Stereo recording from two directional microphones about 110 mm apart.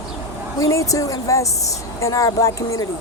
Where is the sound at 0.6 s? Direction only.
30° left (ahead or behind).